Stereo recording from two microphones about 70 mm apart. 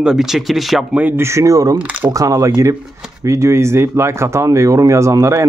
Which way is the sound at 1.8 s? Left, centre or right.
Right.